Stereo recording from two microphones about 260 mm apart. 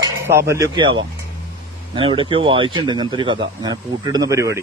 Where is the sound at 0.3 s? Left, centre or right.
Centre.